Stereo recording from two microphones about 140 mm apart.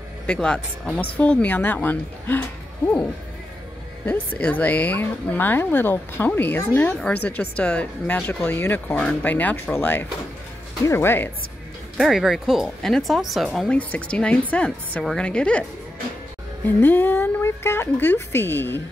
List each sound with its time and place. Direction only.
0.3 s a woman's voice: 5° left (ahead or behind)
4.0 s a woman's voice: 10° left (ahead or behind)
12.0 s a woman's voice: centre (ahead or behind)
16.6 s a woman's voice: 15° left (ahead or behind)